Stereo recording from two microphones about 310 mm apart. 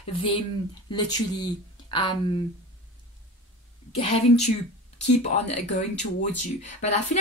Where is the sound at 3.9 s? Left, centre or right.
Centre.